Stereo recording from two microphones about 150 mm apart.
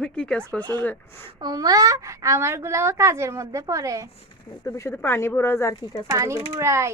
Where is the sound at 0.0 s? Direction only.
5° left (ahead or behind).